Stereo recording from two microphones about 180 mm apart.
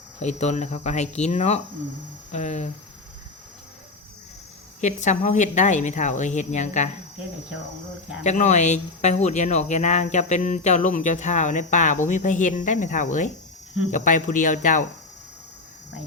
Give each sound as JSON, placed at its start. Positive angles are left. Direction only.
{"t": 0.2, "sound": "speech", "side_deg": 40}
{"t": 4.8, "sound": "speech", "side_deg": 40}
{"t": 8.2, "sound": "speech", "side_deg": 40}